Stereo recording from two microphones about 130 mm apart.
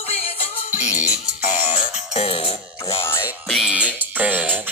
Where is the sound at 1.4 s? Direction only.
75° left (ahead or behind); by 2.6 s 50° left (ahead or behind).